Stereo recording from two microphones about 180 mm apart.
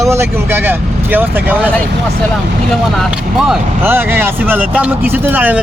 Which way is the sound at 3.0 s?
5° right (ahead or behind).